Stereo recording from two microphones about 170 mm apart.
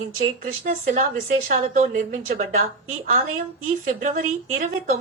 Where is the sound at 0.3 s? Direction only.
55° right (ahead or behind).